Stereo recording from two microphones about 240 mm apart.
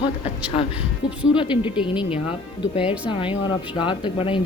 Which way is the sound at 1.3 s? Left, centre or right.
Left.